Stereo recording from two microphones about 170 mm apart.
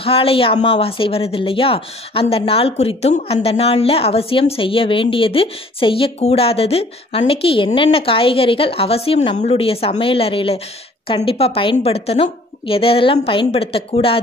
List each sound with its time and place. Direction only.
0.0 s speech: 35° left (ahead or behind)